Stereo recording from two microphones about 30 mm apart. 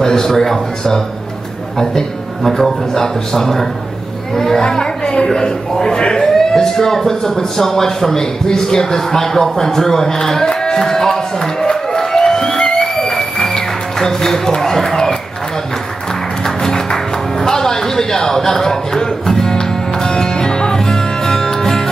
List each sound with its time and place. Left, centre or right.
0.0 s speech: centre
8.5 s a sound: centre
16.1 s music: centre